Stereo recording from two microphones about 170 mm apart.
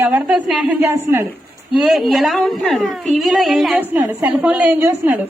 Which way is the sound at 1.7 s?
Centre (ahead or behind).